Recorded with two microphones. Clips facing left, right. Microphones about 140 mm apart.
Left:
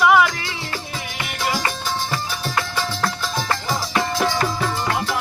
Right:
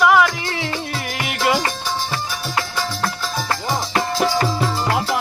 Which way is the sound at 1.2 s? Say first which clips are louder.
Right 6 dB; 70° right (ahead or behind).